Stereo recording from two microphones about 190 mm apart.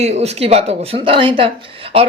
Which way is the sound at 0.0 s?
35° right (ahead or behind).